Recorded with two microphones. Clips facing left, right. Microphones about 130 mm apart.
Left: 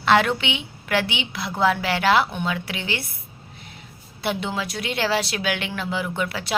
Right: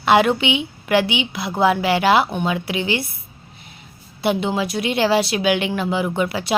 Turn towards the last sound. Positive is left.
turn(degrees=-15)  # may be behind; listen again after turning